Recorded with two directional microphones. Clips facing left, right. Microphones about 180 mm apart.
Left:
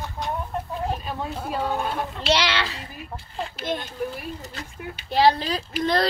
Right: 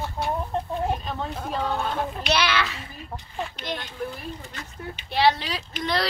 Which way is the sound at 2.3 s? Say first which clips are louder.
Left 2 dB; 30° left (ahead or behind).